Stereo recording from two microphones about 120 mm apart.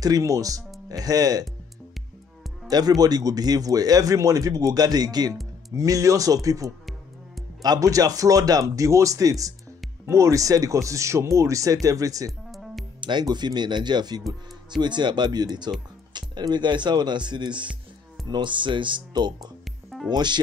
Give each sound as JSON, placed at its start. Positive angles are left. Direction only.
{"t": 0.0, "sound": "speech", "side_deg": -30}
{"t": 2.7, "sound": "speech", "side_deg": -35}
{"t": 12.4, "sound": "music", "side_deg": 0}
{"t": 13.0, "sound": "speech", "side_deg": -40}